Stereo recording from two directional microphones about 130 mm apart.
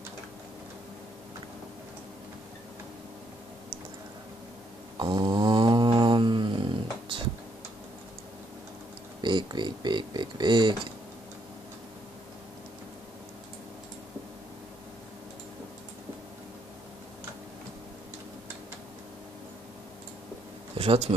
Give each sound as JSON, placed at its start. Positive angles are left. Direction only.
{"t": 4.9, "sound": "snoring", "side_deg": -35}
{"t": 9.2, "sound": "speech", "side_deg": -35}
{"t": 20.7, "sound": "a sound", "side_deg": -45}